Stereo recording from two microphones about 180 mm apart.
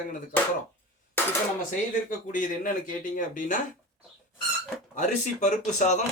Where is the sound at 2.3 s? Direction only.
50° left (ahead or behind).